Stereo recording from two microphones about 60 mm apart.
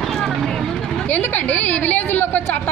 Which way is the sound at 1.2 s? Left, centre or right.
Left.